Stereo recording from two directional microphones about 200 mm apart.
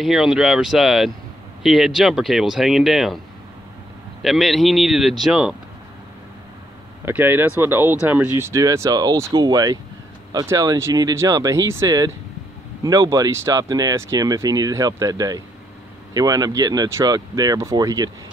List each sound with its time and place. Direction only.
0.0 s speech: centre (ahead or behind)
4.2 s speech: centre (ahead or behind)
7.1 s speech: 10° right (ahead or behind)